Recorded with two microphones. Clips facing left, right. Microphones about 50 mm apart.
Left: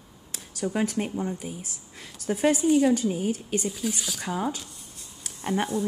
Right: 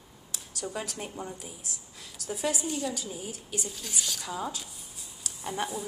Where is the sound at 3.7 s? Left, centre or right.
Centre.